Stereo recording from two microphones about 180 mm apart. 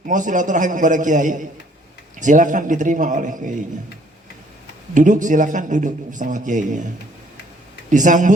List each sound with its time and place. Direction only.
0.1 s a man's voice: 45° right (ahead or behind)
4.9 s a man's voice: 45° right (ahead or behind)
7.9 s a man's voice: 45° right (ahead or behind)